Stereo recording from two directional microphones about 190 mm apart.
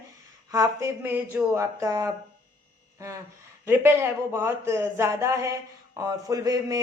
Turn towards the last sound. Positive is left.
turn(degrees=-20)  # may be behind; listen again after turning